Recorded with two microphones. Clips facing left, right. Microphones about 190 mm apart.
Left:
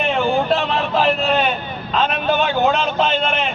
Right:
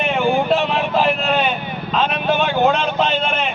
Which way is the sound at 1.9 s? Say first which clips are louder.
Even; centre (ahead or behind).